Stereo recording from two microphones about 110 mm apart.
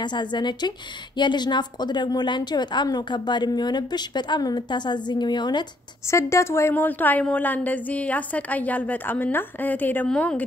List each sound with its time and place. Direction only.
0.1 s a woman's voice: 45° left (ahead or behind)
6.1 s speech: 25° left (ahead or behind)